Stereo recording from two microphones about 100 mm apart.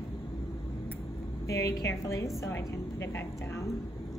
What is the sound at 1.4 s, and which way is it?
A woman's voice, 30° left (ahead or behind).